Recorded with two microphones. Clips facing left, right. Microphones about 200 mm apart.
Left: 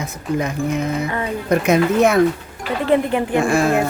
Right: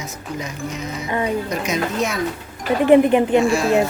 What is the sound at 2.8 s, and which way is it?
Speech, 15° right (ahead or behind).